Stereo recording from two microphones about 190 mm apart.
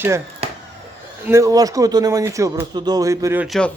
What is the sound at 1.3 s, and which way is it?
Speech, 15° right (ahead or behind).